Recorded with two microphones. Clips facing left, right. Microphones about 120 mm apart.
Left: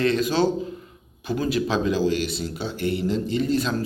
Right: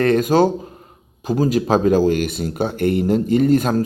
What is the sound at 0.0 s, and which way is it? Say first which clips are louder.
Speech: right 6 dB; 50° right (ahead or behind).